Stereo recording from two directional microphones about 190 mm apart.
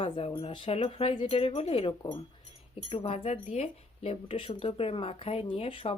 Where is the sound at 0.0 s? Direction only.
30° left (ahead or behind).